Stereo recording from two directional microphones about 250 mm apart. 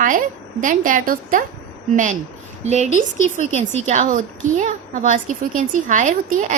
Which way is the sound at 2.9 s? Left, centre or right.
Left.